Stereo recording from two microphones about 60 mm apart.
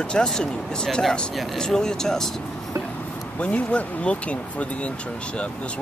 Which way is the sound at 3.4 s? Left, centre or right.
Left.